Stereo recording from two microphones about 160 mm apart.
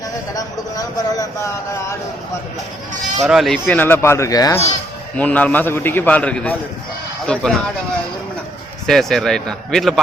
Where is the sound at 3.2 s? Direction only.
Centre (ahead or behind); by 4.6 s 20° left (ahead or behind).